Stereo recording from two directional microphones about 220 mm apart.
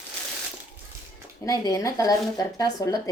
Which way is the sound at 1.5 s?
15° left (ahead or behind).